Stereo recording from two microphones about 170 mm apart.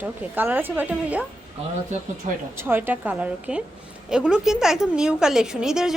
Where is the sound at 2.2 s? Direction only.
45° right (ahead or behind).